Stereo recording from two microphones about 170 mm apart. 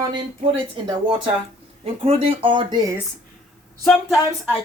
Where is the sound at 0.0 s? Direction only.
25° right (ahead or behind).